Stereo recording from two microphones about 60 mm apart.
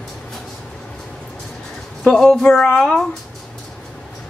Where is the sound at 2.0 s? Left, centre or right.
Centre.